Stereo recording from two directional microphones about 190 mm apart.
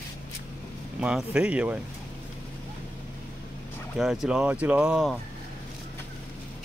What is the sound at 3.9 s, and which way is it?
Speech, centre (ahead or behind).